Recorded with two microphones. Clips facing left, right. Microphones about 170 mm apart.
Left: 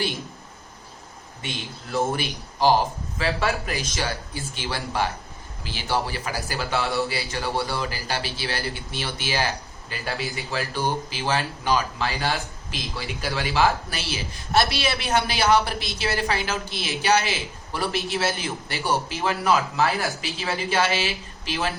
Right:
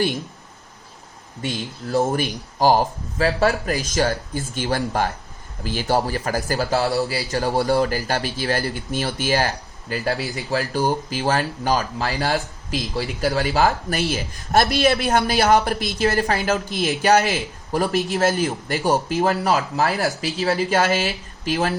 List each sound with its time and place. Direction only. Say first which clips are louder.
1.4 s a man's voice: right 7 dB; 40° right (ahead or behind)